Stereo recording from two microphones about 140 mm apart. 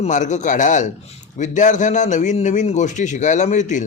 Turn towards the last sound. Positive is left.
turn(degrees=60)  # may be behind; listen again after turning